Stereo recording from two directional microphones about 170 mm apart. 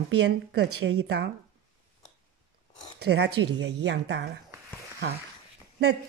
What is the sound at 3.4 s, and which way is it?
Speech, 90° right.